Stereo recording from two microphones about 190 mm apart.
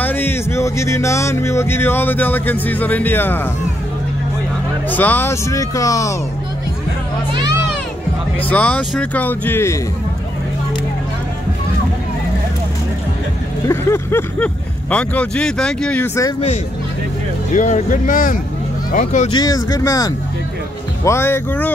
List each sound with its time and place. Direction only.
0.0 s speech: 10° left (ahead or behind)
4.8 s speech: 10° left (ahead or behind)
8.5 s speech: 10° left (ahead or behind)
13.7 s speech: 15° left (ahead or behind)
17.6 s speech: 40° left (ahead or behind)
19.3 s speech: 20° left (ahead or behind)